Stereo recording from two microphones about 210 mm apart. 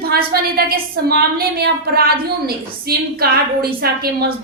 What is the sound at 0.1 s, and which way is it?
A woman's voice, 45° right (ahead or behind).